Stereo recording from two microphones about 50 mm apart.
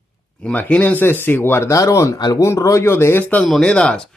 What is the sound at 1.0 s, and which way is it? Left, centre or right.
Speech, left.